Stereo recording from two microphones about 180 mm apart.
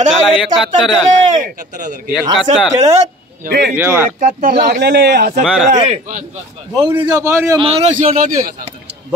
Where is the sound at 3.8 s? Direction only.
10° right (ahead or behind).